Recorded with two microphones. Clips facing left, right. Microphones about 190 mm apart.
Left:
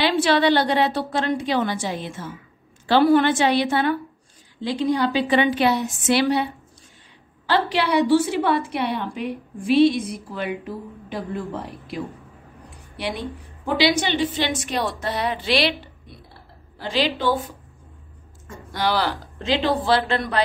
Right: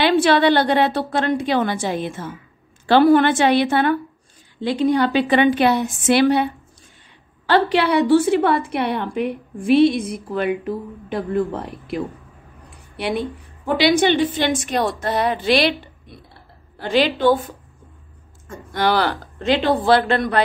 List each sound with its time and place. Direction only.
0.0 s a woman's voice: 55° right (ahead or behind)
16.8 s a woman's voice: 55° right (ahead or behind)
18.8 s a woman's voice: 55° right (ahead or behind)